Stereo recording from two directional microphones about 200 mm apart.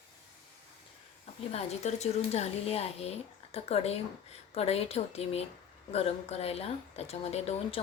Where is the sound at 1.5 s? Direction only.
35° left (ahead or behind).